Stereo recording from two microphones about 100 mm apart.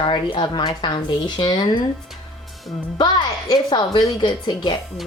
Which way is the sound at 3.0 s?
45° left (ahead or behind).